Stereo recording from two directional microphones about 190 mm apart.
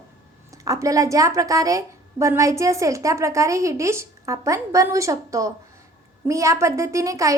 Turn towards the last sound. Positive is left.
turn(degrees=-15)  # may be behind; listen again after turning